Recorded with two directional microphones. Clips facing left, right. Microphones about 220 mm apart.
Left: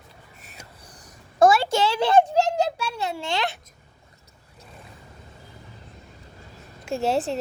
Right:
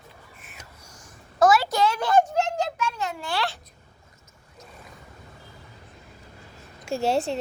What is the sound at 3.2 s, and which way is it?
Speech, 20° left (ahead or behind).